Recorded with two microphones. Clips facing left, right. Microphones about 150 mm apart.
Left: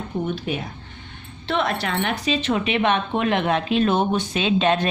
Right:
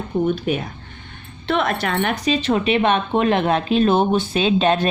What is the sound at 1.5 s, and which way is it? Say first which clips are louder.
A woman's voice: right 3 dB; 55° right (ahead or behind).